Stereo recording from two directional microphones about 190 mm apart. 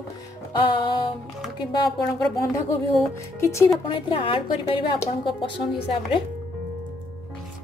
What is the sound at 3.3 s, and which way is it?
Speech, 15° left (ahead or behind).